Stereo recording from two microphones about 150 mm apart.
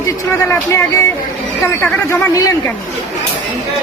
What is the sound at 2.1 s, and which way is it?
Speech, 20° left (ahead or behind).